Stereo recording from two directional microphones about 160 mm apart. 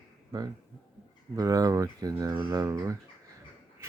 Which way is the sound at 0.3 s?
25° right (ahead or behind).